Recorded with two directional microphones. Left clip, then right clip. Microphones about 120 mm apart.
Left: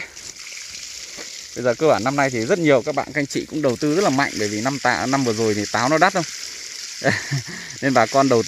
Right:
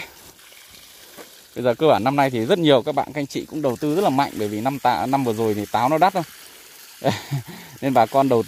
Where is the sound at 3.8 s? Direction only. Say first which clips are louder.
Even; 20° right (ahead or behind).